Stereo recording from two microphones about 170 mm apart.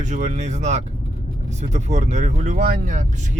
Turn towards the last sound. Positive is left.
turn(degrees=-45)  # may be behind; listen again after turning